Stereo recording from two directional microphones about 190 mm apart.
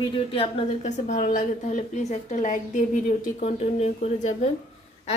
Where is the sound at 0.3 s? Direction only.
35° left (ahead or behind).